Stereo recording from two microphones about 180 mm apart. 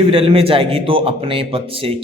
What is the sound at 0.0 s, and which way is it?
Speech, 30° right (ahead or behind).